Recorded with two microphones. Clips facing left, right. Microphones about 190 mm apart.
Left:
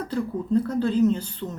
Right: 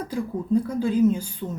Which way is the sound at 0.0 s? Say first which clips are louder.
Left 1 dB; 10° right (ahead or behind).